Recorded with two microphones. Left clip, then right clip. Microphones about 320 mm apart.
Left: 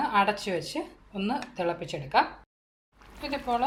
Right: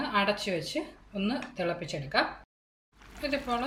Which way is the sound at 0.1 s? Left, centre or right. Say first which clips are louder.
Left 3 dB; centre.